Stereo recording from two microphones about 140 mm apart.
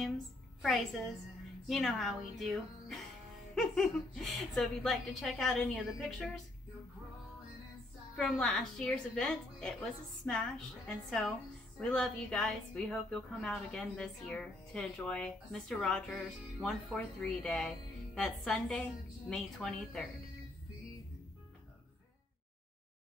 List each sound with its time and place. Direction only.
1.7 s a woman's voice: centre (ahead or behind)
8.2 s a woman's voice: 5° left (ahead or behind)